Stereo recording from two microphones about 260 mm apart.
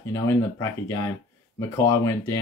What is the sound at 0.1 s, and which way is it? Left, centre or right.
Speech, centre.